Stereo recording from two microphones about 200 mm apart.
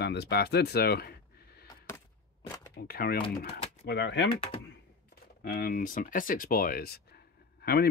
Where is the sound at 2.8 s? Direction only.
50° left (ahead or behind).